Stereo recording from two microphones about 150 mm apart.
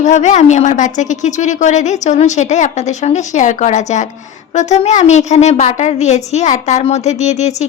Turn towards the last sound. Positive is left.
turn(degrees=50)  # may be behind; listen again after turning